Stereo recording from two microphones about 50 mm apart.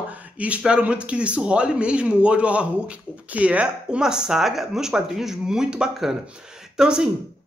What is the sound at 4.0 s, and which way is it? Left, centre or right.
Speech, centre.